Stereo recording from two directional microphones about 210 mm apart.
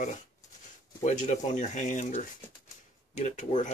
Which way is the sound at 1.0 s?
35° left (ahead or behind).